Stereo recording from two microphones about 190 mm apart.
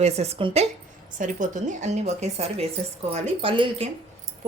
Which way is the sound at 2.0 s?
35° right (ahead or behind).